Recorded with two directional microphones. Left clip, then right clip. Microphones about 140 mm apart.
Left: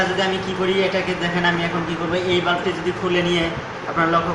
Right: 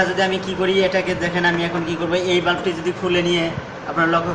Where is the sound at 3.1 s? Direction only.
15° right (ahead or behind).